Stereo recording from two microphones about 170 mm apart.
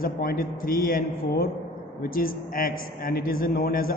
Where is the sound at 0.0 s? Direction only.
60° left (ahead or behind).